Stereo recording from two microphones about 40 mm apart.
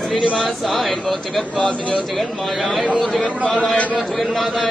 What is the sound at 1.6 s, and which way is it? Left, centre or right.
Speech, left.